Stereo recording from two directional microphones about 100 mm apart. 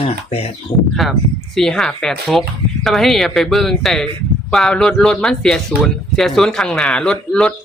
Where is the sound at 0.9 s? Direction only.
Centre (ahead or behind).